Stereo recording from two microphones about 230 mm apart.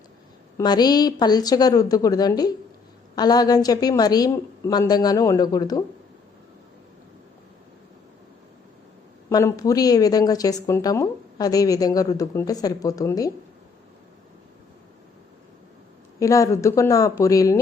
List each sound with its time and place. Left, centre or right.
0.5 s speech: centre
9.3 s speech: centre
16.2 s speech: centre